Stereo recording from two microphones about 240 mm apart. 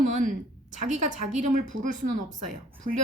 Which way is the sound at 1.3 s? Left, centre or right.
Right.